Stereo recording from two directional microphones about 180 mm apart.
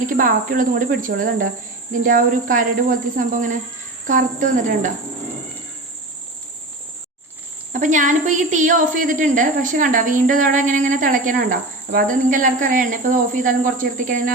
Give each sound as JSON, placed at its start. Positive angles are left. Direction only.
{"t": 0.1, "sound": "a woman's voice", "side_deg": -50}
{"t": 7.7, "sound": "a woman's voice", "side_deg": -45}